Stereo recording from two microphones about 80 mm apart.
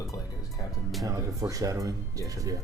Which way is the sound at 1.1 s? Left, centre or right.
Right.